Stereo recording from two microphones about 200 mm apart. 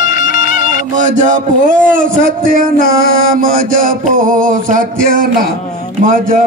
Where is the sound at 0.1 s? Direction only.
45° left (ahead or behind).